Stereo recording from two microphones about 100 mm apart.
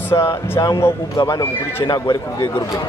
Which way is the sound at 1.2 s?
40° left (ahead or behind).